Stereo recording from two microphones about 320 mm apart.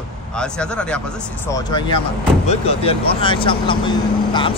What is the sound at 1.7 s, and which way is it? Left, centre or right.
Speech, centre.